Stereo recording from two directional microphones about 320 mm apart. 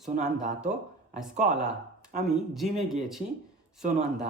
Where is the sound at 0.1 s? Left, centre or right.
Right.